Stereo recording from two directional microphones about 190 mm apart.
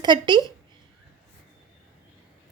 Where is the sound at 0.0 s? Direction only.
25° right (ahead or behind).